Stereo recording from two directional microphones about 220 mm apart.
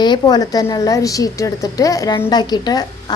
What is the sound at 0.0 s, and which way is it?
A woman's voice, 20° left (ahead or behind).